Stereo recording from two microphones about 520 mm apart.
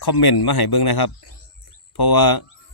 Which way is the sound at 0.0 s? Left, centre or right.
Left.